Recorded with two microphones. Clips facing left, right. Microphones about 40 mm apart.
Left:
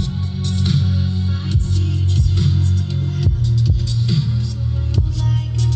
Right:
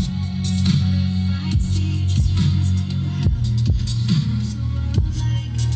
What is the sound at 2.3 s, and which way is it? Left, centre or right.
Music, right.